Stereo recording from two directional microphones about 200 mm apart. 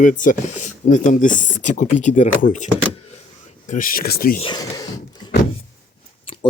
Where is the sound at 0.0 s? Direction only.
40° left (ahead or behind).